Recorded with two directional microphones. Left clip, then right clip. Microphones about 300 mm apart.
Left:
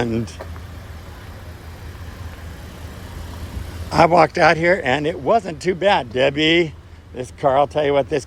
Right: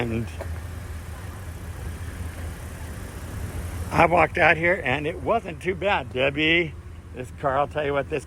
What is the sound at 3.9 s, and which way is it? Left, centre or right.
Speech, left.